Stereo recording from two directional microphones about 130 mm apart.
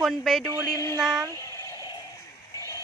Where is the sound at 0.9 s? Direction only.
25° right (ahead or behind).